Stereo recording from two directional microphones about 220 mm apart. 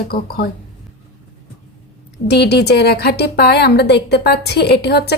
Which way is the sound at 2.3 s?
50° left (ahead or behind).